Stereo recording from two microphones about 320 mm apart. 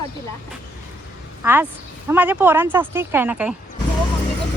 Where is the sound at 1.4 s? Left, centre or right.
Centre.